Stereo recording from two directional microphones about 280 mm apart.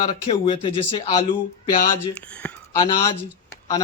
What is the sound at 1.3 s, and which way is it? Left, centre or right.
Speech, left.